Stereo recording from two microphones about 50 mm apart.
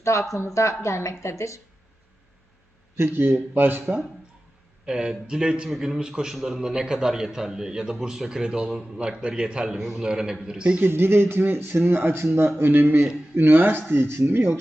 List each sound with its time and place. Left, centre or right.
0.0 s speech: left
0.3 s speech: left
2.9 s speech: right
4.9 s a man's voice: centre
9.6 s a man's voice: centre
10.8 s speech: right
13.9 s speech: right